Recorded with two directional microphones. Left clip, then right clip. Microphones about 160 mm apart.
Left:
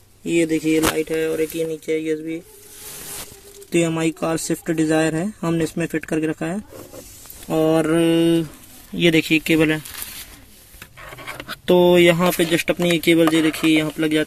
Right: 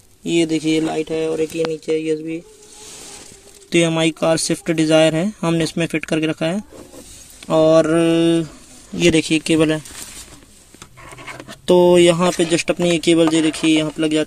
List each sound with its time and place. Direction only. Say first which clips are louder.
0.2 s speech: right 1 dB; 15° right (ahead or behind)
3.7 s speech: right 4 dB; 15° right (ahead or behind)
11.1 s a sound: even; 15° right (ahead or behind)
11.3 s speech: right 2 dB; 5° right (ahead or behind)